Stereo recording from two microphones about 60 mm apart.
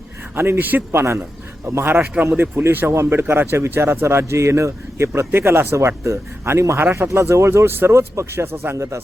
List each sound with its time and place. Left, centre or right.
0.3 s speech: right
5.7 s speech: right